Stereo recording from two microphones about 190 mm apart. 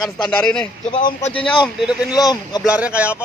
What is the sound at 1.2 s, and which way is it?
Speech, 30° left (ahead or behind).